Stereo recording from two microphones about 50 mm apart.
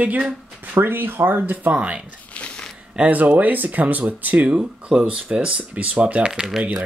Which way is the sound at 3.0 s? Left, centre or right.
Right.